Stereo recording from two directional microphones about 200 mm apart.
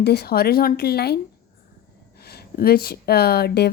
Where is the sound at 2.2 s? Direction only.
50° left (ahead or behind).